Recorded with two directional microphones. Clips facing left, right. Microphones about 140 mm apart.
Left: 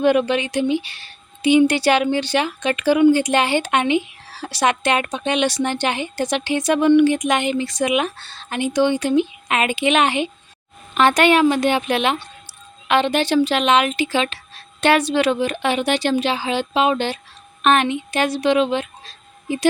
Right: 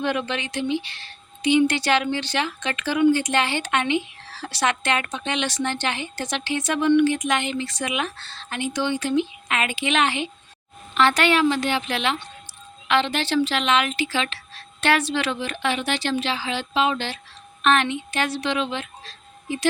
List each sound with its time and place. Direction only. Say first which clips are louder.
0.0 s a woman's voice: left 9 dB; 15° left (ahead or behind)